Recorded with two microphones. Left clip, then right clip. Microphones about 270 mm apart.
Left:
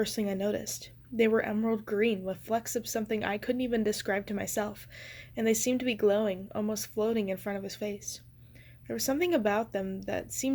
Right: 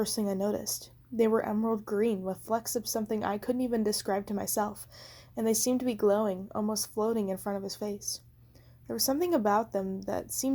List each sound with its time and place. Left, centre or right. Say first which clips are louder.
0.1 s speech: even; right
1.3 s speech: even; right
2.3 s speech: even; right
4.4 s speech: right 2 dB; right